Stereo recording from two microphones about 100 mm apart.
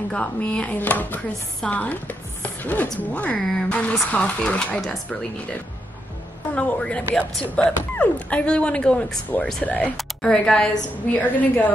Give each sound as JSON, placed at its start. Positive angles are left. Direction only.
{"t": 0.1, "sound": "speech", "side_deg": 10}
{"t": 1.6, "sound": "chopping", "side_deg": 15}
{"t": 3.4, "sound": "speech", "side_deg": 10}
{"t": 6.5, "sound": "speech", "side_deg": 10}